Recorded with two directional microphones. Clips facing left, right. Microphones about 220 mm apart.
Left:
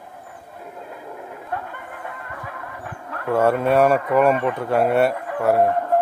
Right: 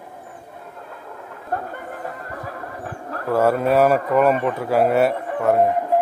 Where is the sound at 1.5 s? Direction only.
40° right (ahead or behind).